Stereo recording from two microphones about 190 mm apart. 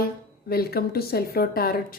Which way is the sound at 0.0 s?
55° left (ahead or behind).